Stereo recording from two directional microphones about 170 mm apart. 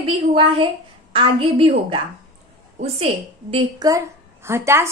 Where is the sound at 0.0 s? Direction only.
35° right (ahead or behind).